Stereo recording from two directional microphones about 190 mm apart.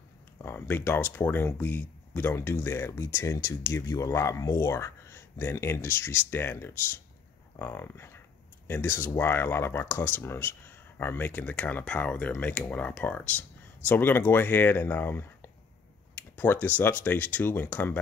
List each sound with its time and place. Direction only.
0.4 s speech: 10° left (ahead or behind)